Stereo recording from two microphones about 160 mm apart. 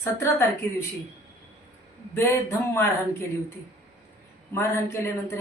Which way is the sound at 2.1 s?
15° left (ahead or behind).